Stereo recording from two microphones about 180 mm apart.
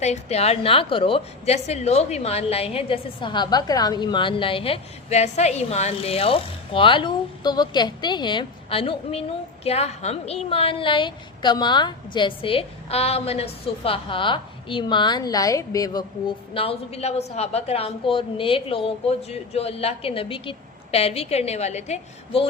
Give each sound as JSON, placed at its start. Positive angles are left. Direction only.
{"t": 0.0, "sound": "a woman's voice", "side_deg": 35}